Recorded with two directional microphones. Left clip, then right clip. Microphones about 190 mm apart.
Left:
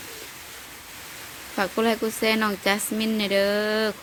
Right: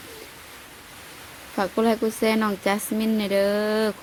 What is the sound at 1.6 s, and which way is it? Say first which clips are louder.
Speech: right 1 dB; 10° right (ahead or behind).